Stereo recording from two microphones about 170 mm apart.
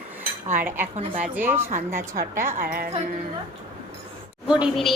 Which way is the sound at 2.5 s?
55° right (ahead or behind).